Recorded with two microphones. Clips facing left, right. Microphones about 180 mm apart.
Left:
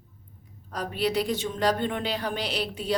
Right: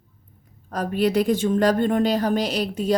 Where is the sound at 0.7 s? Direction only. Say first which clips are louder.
Right 6 dB; 45° right (ahead or behind).